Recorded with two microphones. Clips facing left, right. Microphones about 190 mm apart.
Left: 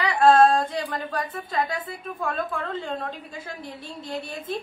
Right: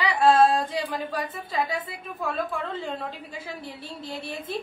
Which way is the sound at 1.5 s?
5° right (ahead or behind).